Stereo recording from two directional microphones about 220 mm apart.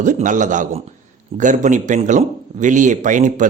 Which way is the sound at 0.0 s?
35° right (ahead or behind).